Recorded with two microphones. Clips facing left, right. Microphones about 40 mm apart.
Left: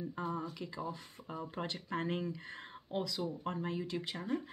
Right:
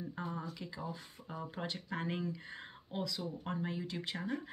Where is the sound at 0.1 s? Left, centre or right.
Centre.